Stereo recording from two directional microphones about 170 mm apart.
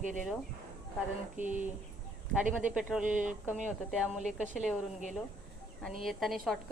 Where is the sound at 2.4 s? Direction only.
10° right (ahead or behind).